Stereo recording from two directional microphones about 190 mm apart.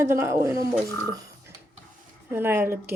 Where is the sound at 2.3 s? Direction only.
10° right (ahead or behind).